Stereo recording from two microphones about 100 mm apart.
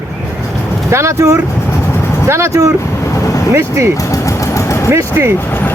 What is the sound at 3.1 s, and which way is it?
Vehicle, 30° left (ahead or behind).